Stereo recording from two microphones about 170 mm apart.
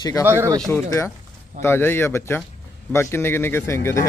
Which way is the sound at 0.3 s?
15° right (ahead or behind).